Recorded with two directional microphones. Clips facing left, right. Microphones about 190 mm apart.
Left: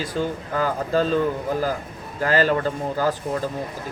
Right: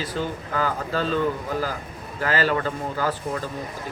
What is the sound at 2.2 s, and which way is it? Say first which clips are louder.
Speech: left 4 dB; 45° left (ahead or behind).